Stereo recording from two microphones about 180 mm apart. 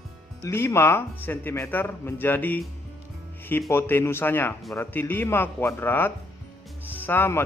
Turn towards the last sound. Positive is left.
turn(degrees=10)  # may be behind; listen again after turning